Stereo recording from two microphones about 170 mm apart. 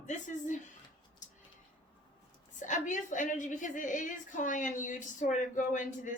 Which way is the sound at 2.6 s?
45° left (ahead or behind).